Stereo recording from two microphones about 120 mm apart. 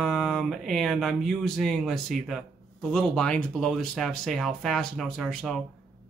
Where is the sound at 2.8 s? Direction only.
5° left (ahead or behind).